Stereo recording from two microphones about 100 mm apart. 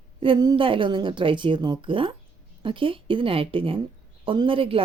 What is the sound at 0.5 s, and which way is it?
Speech, 60° right (ahead or behind).